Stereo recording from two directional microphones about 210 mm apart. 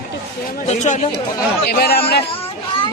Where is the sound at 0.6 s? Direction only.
35° left (ahead or behind).